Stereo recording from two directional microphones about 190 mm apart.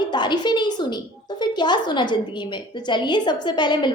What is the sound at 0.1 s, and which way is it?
A woman's voice, 25° left (ahead or behind).